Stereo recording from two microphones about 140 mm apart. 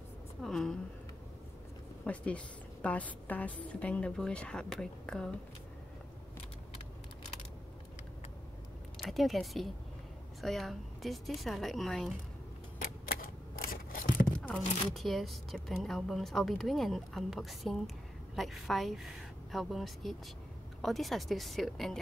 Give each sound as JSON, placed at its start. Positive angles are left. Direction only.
{"t": 0.4, "sound": "a woman's voice", "side_deg": 5}
{"t": 2.0, "sound": "a woman's voice", "side_deg": 10}
{"t": 8.9, "sound": "speech", "side_deg": 0}
{"t": 12.8, "sound": "typewriter", "side_deg": 90}
{"t": 15.0, "sound": "speech", "side_deg": 0}